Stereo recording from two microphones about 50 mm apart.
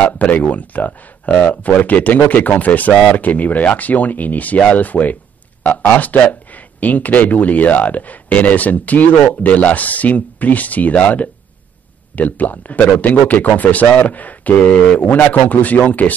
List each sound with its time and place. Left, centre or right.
0.0 s speech: left